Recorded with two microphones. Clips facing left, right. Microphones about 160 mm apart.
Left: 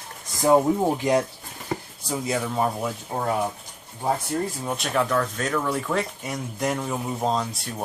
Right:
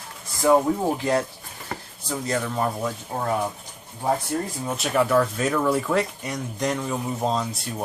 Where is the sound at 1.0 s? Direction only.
15° left (ahead or behind).